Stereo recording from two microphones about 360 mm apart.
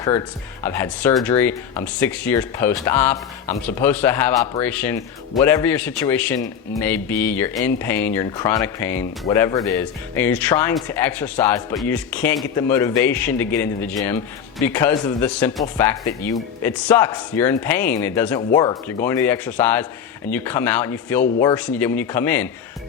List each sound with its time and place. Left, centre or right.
0.0 s speech: centre